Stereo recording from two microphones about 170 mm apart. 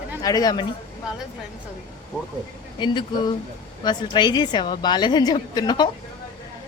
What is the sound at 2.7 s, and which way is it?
A woman's voice, 25° left (ahead or behind).